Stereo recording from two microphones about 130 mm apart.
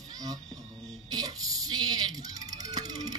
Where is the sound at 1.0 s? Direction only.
30° right (ahead or behind).